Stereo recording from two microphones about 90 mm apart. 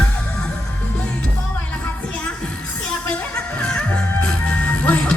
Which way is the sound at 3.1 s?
10° left (ahead or behind).